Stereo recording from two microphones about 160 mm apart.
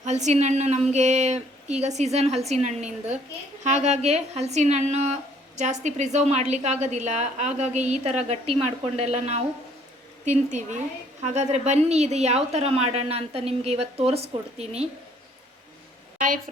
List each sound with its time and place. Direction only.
0.0 s a woman's voice: 45° right (ahead or behind)
16.1 s a woman's voice: 55° right (ahead or behind)